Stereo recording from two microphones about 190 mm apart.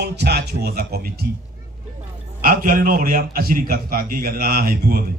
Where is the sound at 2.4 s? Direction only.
50° right (ahead or behind).